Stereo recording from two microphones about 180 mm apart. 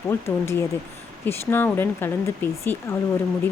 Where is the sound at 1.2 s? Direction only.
10° left (ahead or behind).